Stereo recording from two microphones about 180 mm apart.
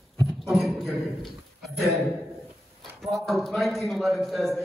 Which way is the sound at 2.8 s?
Centre (ahead or behind).